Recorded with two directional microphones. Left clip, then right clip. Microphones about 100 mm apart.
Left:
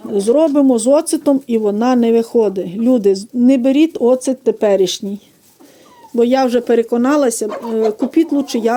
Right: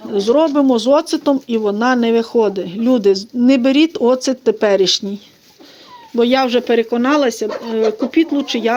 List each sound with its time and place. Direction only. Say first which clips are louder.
0.1 s speech: left 1 dB; 85° left
2.4 s speech: left 1 dB; 60° left (ahead or behind)
3.4 s speech: even; 45° left (ahead or behind)
6.1 s speech: left 1 dB; 55° left (ahead or behind)